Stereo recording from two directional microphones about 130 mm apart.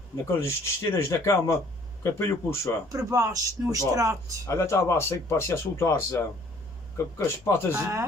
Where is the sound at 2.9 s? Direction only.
25° right (ahead or behind).